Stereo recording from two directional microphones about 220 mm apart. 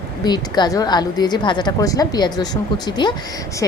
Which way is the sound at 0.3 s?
20° left (ahead or behind).